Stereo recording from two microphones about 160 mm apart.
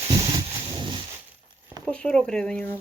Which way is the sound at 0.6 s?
30° right (ahead or behind).